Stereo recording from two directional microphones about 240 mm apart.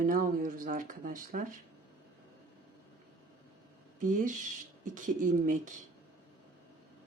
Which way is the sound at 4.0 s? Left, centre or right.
Right.